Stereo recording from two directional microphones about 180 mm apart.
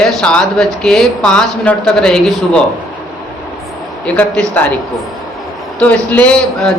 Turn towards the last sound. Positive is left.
turn(degrees=5)  # may be behind; listen again after turning